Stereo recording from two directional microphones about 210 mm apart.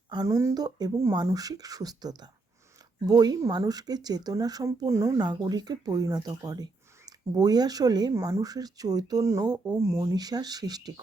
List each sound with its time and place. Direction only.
0.1 s speech: 15° right (ahead or behind)